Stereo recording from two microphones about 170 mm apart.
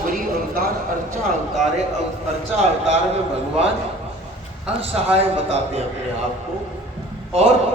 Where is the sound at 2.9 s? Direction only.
40° right (ahead or behind).